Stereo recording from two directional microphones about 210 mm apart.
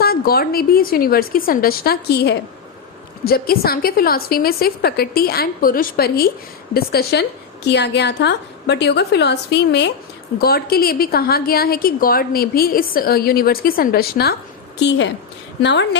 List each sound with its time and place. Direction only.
0.0 s a woman's voice: 45° left (ahead or behind)
14.8 s speech: 60° left (ahead or behind)